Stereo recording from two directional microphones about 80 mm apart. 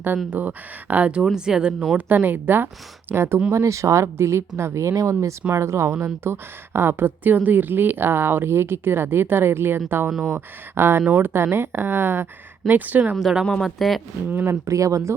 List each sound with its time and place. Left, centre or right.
0.3 s a woman's voice: right
2.0 s a woman's voice: right
13.1 s speech: centre
14.2 s a woman's voice: right
14.7 s speech: right